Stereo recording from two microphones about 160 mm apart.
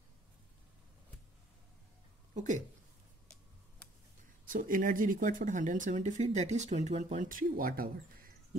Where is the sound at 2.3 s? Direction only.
50° right (ahead or behind).